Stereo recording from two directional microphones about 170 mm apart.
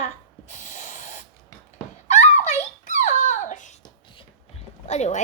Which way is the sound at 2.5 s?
45° left (ahead or behind).